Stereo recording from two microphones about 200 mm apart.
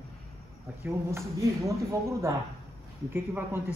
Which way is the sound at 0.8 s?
15° right (ahead or behind).